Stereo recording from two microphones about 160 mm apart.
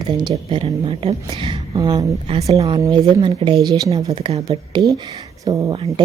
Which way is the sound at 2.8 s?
25° right (ahead or behind).